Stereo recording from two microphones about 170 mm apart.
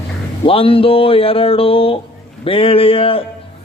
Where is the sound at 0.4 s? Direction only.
30° left (ahead or behind).